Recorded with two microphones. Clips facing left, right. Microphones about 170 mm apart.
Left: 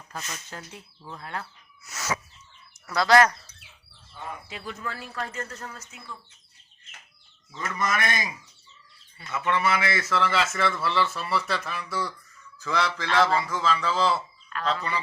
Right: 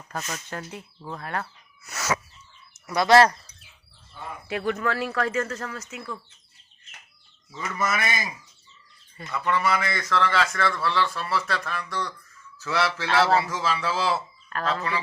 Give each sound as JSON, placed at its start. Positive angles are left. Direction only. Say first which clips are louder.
{"t": 0.1, "sound": "speech", "louder": "right 5 dB", "side_deg": -60}
{"t": 2.8, "sound": "speech", "louder": "right 2 dB", "side_deg": -20}
{"t": 4.4, "sound": "speech", "louder": "right 15 dB", "side_deg": -70}
{"t": 7.6, "sound": "a man's voice", "louder": "even", "side_deg": -10}
{"t": 9.3, "sound": "a man's voice", "louder": "right 1 dB", "side_deg": 0}
{"t": 14.5, "sound": "speech", "louder": "right 3 dB", "side_deg": -40}